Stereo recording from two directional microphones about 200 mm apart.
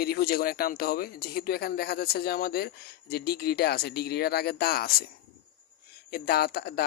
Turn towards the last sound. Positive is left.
turn(degrees=50)  # may be behind; listen again after turning